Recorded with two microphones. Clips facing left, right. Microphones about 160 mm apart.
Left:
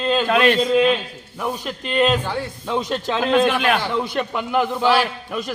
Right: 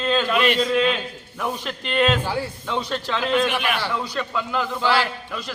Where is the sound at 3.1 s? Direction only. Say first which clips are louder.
Left 4 dB; 50° left (ahead or behind).